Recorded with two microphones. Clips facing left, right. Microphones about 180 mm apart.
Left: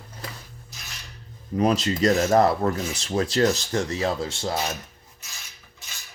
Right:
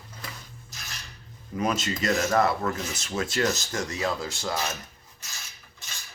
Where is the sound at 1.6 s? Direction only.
35° left (ahead or behind).